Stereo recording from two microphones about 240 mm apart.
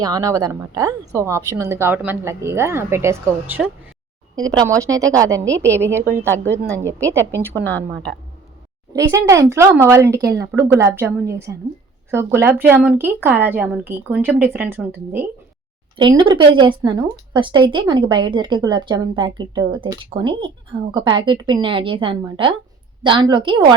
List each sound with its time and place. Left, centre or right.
0.0 s speech: centre
7.5 s a woman's voice: centre
8.9 s speech: centre
16.0 s a woman's voice: centre